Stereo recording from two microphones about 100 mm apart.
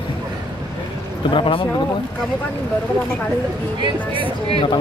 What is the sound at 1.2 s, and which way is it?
Speech, 60° left (ahead or behind).